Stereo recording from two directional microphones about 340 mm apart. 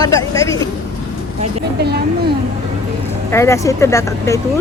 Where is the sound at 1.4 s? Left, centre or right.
Right.